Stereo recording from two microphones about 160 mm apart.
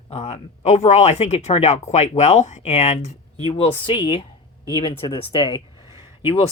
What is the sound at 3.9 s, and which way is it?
Speech, 30° left (ahead or behind).